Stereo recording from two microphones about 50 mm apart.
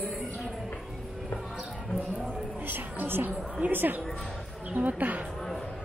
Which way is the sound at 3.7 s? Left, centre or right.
Right.